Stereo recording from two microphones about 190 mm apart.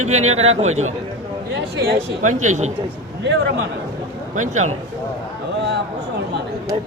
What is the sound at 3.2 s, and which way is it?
Speech, 70° right (ahead or behind).